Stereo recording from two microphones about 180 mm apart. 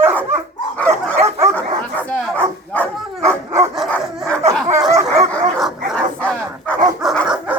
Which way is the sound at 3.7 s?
Centre (ahead or behind).